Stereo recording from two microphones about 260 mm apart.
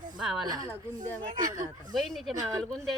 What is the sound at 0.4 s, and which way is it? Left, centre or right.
Speech, centre.